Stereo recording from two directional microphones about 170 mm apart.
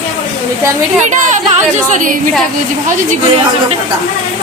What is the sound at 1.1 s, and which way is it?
Speech, 45° right (ahead or behind).